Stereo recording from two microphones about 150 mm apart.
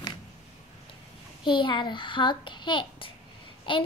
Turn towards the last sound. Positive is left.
turn(degrees=35)  # may be behind; listen again after turning